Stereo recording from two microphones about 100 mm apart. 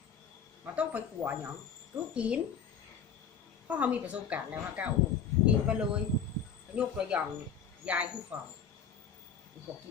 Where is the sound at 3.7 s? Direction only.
15° right (ahead or behind).